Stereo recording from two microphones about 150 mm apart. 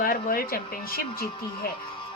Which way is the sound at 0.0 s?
75° left (ahead or behind).